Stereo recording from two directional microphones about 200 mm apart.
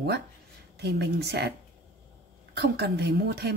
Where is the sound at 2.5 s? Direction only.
55° right (ahead or behind).